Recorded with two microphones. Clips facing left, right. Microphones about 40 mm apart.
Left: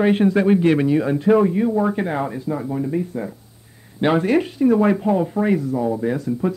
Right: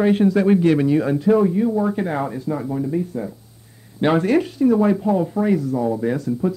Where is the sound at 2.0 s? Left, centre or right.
Centre.